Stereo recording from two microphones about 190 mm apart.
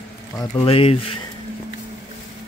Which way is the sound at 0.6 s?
30° left (ahead or behind).